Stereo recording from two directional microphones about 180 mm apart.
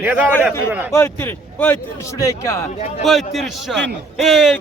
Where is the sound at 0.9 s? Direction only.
15° left (ahead or behind).